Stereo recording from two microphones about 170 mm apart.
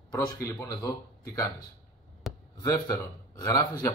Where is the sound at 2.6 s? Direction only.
20° left (ahead or behind).